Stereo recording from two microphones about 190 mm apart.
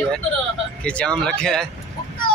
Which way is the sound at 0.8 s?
5° left (ahead or behind).